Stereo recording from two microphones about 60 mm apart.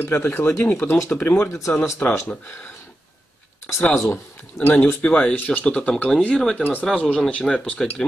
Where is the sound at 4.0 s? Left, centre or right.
Left; by 7.9 s centre.